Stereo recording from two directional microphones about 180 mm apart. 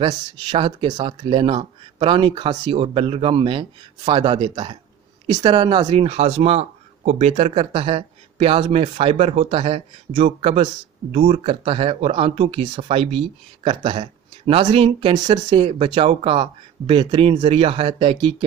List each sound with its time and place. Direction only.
0.0 s speech: 25° right (ahead or behind)